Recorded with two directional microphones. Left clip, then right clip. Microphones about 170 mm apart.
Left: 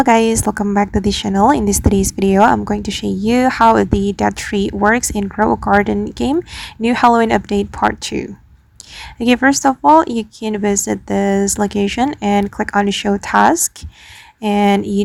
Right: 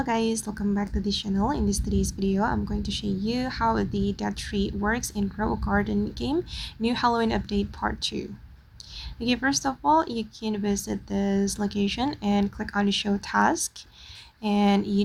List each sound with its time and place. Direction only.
0.0 s speech: 65° left (ahead or behind)